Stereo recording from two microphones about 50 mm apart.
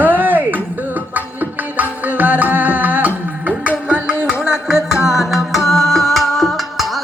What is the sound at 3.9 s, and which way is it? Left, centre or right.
Music, centre.